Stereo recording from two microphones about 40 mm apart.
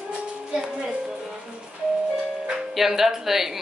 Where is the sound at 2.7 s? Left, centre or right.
Centre.